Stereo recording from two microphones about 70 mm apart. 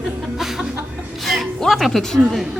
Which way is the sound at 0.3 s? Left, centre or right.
Centre.